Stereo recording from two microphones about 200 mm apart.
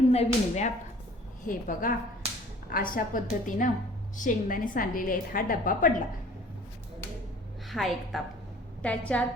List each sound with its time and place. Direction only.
0.1 s a woman's voice: 35° left (ahead or behind)
7.7 s a woman's voice: centre (ahead or behind)